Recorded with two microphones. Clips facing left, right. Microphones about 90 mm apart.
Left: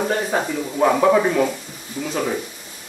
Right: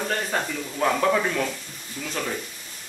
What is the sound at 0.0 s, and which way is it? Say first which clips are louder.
A man's voice: left 6 dB; 15° left (ahead or behind).